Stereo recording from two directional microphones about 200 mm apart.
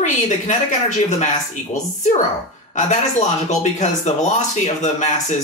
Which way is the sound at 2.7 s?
35° left (ahead or behind).